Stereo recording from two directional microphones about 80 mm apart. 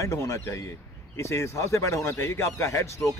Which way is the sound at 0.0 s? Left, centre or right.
Left.